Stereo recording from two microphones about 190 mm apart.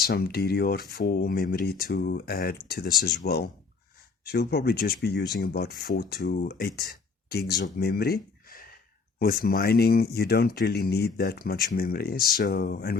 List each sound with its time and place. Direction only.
0.0 s speech: 55° left (ahead or behind)